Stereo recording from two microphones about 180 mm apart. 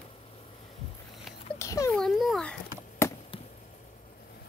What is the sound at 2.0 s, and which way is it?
Speech, centre (ahead or behind).